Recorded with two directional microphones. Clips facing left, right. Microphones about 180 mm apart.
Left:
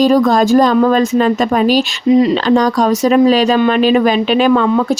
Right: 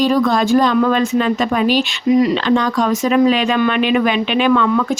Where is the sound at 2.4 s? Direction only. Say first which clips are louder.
Left 4 dB; 40° left (ahead or behind).